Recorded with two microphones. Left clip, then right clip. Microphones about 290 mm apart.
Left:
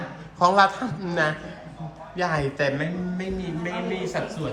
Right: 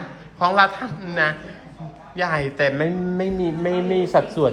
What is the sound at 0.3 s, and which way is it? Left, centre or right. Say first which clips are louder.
A man's voice: right 1 dB; centre.